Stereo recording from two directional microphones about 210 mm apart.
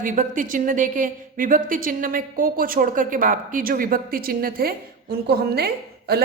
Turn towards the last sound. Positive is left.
turn(degrees=-50)  # may be behind; listen again after turning